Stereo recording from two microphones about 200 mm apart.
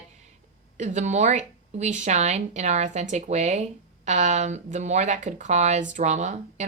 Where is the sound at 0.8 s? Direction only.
35° right (ahead or behind).